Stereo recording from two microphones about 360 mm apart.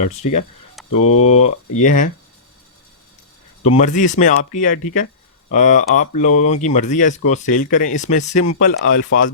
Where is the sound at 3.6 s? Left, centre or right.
Centre.